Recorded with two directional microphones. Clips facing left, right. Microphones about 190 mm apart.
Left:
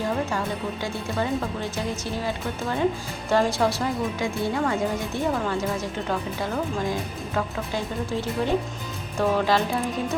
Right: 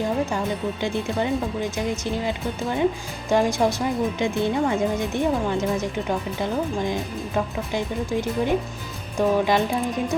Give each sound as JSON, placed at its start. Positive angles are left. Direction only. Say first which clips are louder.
{"t": 0.3, "sound": "speech", "louder": "right 2 dB", "side_deg": -20}